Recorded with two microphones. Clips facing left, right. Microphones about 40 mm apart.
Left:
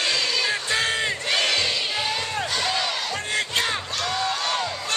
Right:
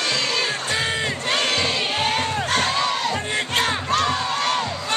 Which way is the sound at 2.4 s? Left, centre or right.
Right.